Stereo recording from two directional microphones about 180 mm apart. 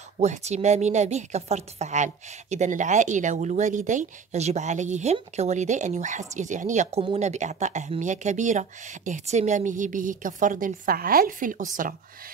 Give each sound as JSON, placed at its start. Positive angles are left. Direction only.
{"t": 0.2, "sound": "a woman's voice", "side_deg": -40}